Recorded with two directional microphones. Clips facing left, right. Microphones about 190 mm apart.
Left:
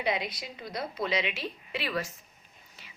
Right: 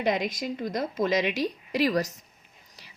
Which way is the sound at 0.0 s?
45° right (ahead or behind).